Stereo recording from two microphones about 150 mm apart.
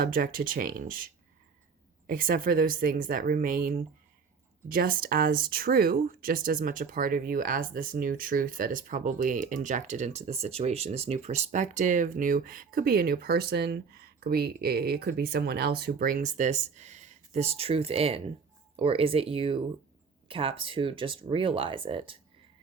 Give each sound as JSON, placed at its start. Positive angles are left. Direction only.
{"t": 0.0, "sound": "speech", "side_deg": -70}